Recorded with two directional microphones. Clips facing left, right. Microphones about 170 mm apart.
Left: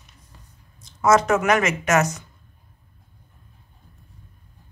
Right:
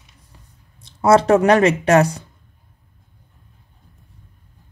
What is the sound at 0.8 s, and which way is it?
Speech, 30° right (ahead or behind).